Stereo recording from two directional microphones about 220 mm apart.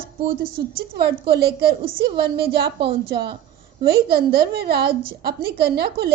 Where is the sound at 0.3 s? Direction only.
40° right (ahead or behind).